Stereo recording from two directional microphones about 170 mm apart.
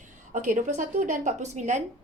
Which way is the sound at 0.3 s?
50° right (ahead or behind).